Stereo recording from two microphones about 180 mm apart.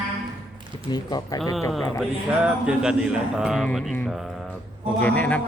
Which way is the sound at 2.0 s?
5° right (ahead or behind).